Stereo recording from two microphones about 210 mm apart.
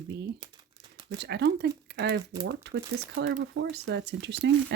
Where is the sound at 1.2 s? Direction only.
50° right (ahead or behind).